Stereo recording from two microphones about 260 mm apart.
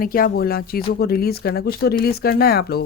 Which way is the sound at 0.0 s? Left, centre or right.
Left.